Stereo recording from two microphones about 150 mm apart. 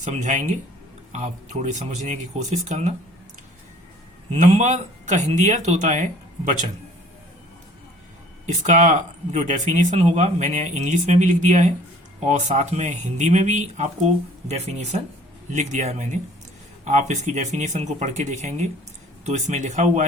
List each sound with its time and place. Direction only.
0.0 s speech: 50° right (ahead or behind)
4.4 s speech: 55° right (ahead or behind)
8.6 s speech: 55° right (ahead or behind)